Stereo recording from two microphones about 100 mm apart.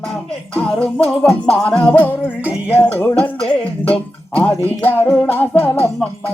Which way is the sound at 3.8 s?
15° left (ahead or behind).